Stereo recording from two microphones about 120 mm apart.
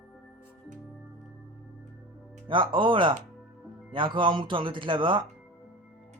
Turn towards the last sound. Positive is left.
turn(degrees=-45)  # may be behind; listen again after turning